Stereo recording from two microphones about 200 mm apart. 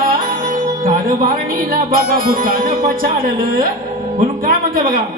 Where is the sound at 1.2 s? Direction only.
45° right (ahead or behind).